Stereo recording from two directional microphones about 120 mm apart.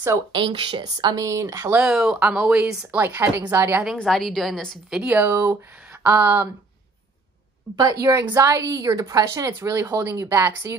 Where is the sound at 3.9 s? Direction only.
Centre (ahead or behind).